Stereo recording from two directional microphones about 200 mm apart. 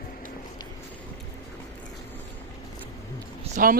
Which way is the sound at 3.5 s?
30° right (ahead or behind).